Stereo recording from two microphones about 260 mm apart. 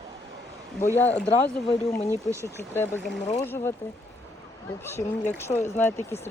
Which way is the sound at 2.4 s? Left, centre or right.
Centre.